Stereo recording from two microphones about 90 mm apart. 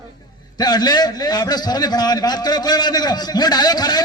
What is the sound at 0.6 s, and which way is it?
A man's voice, 45° left (ahead or behind).